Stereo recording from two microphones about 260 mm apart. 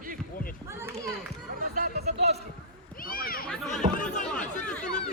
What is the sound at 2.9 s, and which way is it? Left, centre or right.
Speech, left.